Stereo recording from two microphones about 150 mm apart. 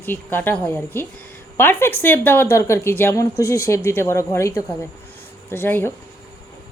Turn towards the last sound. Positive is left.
turn(degrees=15)  # may be behind; listen again after turning